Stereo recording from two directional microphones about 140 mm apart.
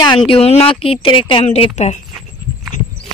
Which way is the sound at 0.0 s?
35° left (ahead or behind).